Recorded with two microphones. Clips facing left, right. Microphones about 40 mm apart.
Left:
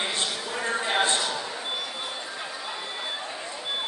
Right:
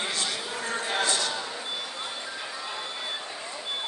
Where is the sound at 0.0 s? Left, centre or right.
Left.